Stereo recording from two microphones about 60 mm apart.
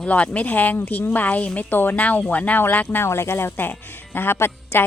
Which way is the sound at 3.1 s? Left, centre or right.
Left.